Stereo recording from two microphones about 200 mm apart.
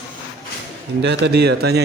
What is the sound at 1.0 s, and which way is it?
Speech, 55° right (ahead or behind).